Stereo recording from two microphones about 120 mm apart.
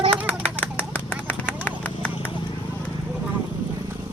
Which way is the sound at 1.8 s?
10° left (ahead or behind).